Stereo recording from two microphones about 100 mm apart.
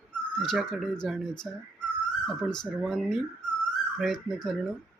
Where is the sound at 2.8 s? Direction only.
Centre (ahead or behind).